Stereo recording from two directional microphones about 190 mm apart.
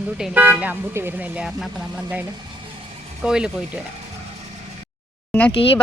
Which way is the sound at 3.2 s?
5° right (ahead or behind).